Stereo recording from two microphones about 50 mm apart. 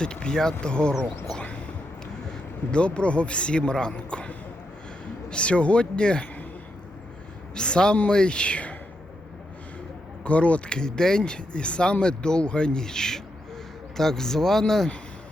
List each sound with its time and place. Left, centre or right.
0.0 s a man's voice: centre
1.4 s a sound: left
2.7 s a man's voice: left
7.5 s a man's voice: centre
10.2 s a man's voice: left
10.8 s speech: centre